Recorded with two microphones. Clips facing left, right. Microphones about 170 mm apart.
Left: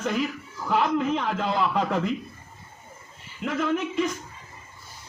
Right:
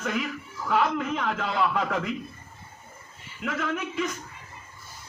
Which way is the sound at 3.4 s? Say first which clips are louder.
Left 4 dB; 35° left (ahead or behind).